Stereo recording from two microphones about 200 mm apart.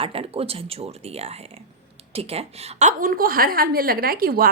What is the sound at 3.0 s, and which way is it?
A woman's voice, 45° right (ahead or behind).